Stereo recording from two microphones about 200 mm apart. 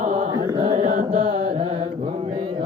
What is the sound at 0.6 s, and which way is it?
Chant, 35° right (ahead or behind).